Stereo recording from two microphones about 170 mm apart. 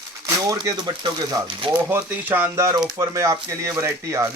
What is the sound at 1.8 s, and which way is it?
Speech, 15° right (ahead or behind).